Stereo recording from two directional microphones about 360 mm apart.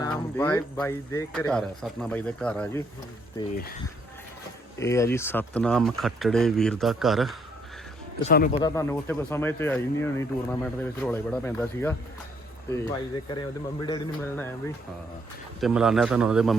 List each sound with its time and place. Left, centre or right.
0.0 s speech: centre
4.8 s speech: centre
8.2 s speech: left
8.5 s speech: centre
15.6 s speech: centre